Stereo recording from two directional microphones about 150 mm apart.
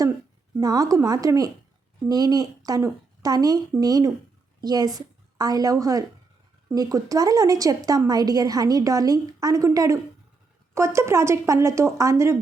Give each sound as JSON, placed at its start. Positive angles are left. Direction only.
{"t": 0.5, "sound": "a woman's voice", "side_deg": -25}